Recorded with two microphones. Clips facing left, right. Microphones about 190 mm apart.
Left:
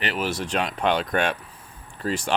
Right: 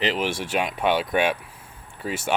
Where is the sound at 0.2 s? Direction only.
10° right (ahead or behind).